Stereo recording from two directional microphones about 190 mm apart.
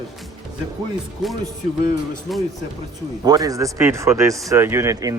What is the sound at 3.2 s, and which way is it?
Speech, 20° right (ahead or behind).